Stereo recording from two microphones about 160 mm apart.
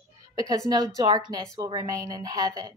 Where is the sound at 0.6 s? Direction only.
25° right (ahead or behind).